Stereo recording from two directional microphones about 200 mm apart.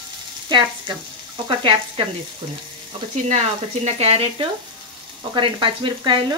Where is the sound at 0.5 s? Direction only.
20° right (ahead or behind).